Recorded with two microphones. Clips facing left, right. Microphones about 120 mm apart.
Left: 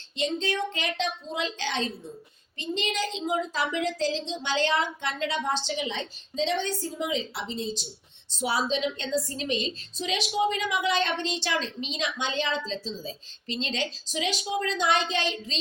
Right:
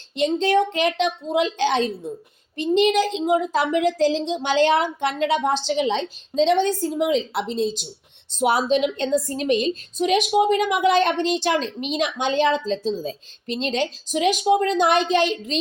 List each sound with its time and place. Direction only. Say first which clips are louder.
0.2 s a woman's voice: right 9 dB; 60° right (ahead or behind); by 7.7 s 75° right (ahead or behind)
8.4 s a woman's voice: right 8 dB; 55° right (ahead or behind)